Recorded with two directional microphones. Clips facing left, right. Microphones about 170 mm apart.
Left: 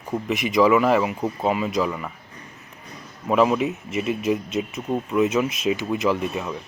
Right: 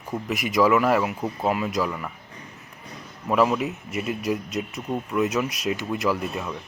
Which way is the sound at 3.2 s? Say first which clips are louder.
Left 2 dB; 10° left (ahead or behind).